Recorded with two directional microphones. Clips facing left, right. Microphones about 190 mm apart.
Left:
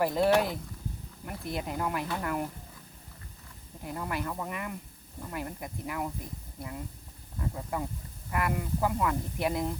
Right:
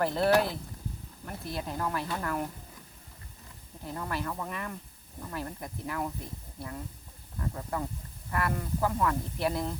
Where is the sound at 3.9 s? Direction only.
10° left (ahead or behind).